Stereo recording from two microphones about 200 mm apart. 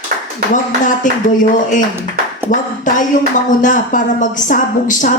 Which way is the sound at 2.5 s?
40° left (ahead or behind).